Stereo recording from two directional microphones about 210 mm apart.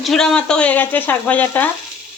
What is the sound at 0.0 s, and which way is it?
Speech, centre (ahead or behind).